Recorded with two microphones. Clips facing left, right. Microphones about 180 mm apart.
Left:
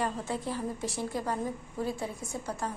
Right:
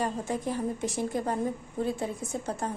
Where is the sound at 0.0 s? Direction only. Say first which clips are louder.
Right 2 dB; 15° right (ahead or behind).